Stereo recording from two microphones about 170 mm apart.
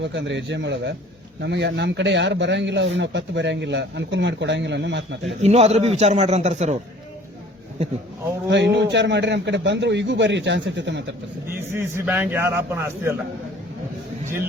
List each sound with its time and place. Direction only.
0.0 s speech: 90° right
5.4 s a man's voice: 40° right (ahead or behind)
8.4 s speech: 90° right
11.7 s a man's voice: 15° right (ahead or behind)